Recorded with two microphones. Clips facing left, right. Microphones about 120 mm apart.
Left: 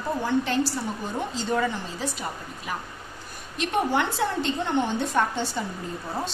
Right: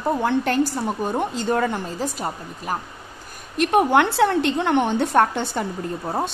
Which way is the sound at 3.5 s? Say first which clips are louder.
Right 7 dB; 60° right (ahead or behind).